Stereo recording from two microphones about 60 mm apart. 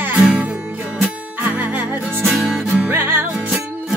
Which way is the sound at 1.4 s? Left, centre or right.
Right.